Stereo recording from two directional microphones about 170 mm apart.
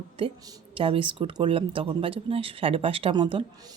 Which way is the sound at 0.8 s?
30° right (ahead or behind).